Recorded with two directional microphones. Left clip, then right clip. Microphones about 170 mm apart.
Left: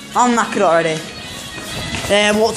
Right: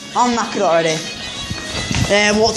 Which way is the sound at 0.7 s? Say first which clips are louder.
Right 2 dB; centre (ahead or behind).